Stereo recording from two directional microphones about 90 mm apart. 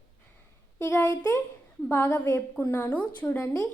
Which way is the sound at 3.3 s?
30° left (ahead or behind).